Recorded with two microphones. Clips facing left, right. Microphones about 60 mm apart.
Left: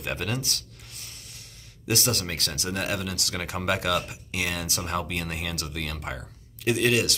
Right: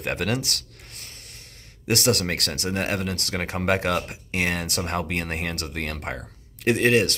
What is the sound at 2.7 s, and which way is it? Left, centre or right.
Speech, right.